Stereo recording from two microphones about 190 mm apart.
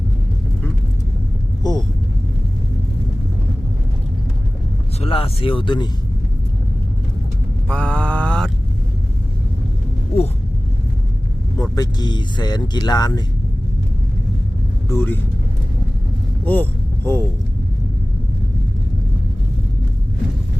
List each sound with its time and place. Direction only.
4.9 s speech: 30° left (ahead or behind)
7.7 s a sound: 5° left (ahead or behind)
10.1 s a sound: 30° left (ahead or behind)
11.5 s speech: 20° left (ahead or behind)
14.8 s speech: 10° left (ahead or behind)
16.5 s speech: 10° left (ahead or behind)